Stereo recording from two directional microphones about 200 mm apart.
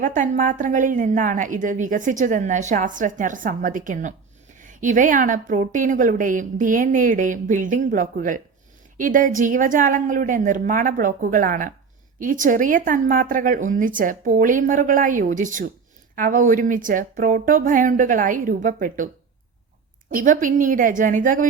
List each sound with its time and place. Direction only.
0.0 s a woman's voice: 40° right (ahead or behind)
20.1 s a woman's voice: 40° right (ahead or behind)